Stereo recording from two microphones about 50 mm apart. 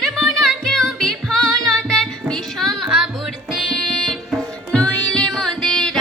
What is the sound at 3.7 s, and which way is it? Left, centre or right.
Music, centre.